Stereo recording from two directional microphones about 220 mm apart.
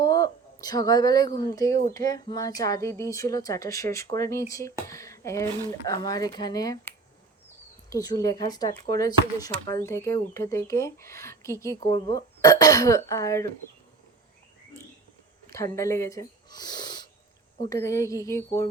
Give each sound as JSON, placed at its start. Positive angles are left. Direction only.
{"t": 0.0, "sound": "speech", "side_deg": 15}
{"t": 7.9, "sound": "speech", "side_deg": 15}
{"t": 15.4, "sound": "speech", "side_deg": 15}